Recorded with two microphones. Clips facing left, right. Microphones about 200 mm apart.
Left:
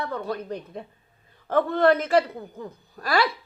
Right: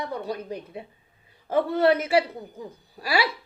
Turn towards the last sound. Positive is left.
turn(degrees=-10)  # may be behind; listen again after turning